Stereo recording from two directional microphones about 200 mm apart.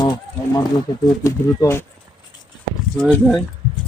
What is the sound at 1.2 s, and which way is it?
Speech, 15° left (ahead or behind).